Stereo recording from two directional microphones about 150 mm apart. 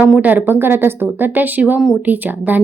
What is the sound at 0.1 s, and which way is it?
A woman's voice, 10° right (ahead or behind).